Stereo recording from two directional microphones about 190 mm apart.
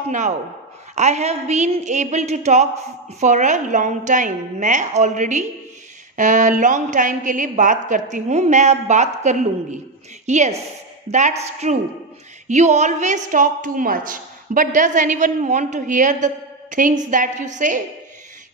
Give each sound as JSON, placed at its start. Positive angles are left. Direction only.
{"t": 0.9, "sound": "a woman's voice", "side_deg": -35}